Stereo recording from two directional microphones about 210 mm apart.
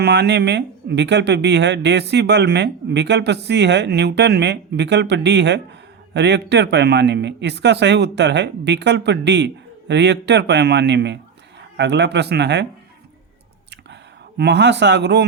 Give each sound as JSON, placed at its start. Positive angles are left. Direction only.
{"t": 0.0, "sound": "speech", "side_deg": -50}
{"t": 14.3, "sound": "speech", "side_deg": -55}